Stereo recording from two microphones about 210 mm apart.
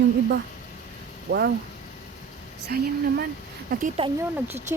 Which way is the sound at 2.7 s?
45° right (ahead or behind).